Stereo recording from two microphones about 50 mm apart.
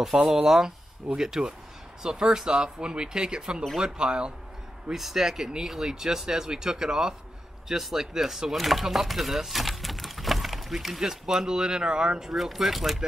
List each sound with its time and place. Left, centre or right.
0.1 s speech: centre
4.9 s speech: centre
12.2 s speech: centre